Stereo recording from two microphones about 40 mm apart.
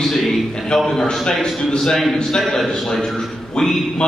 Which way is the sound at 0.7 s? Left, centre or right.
Centre.